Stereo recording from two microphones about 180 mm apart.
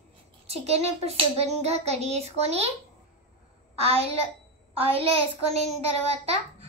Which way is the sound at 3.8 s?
35° right (ahead or behind).